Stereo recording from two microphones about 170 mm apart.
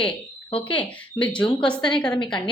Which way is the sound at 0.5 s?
30° left (ahead or behind).